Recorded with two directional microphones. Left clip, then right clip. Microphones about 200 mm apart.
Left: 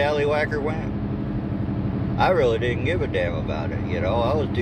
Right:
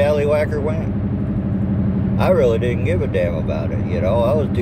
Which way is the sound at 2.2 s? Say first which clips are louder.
Right 3 dB; 5° right (ahead or behind).